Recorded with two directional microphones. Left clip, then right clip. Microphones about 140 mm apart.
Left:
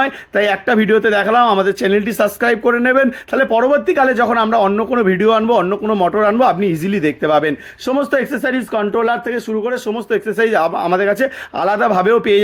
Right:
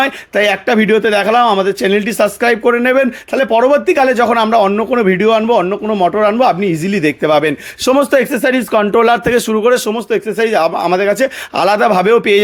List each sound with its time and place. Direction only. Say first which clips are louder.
0.0 s a man's voice: right 3 dB; 20° right (ahead or behind)
7.9 s speech: right 5 dB; 35° right (ahead or behind)
10.2 s a man's voice: right 1 dB; 15° right (ahead or behind)